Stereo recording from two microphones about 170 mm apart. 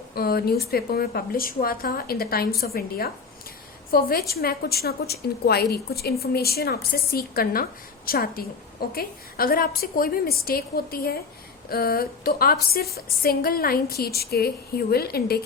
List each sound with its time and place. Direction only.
0.1 s a woman's voice: 65° left (ahead or behind)